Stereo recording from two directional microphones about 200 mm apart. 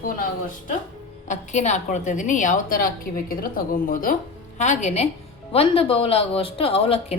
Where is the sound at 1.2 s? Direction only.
35° left (ahead or behind).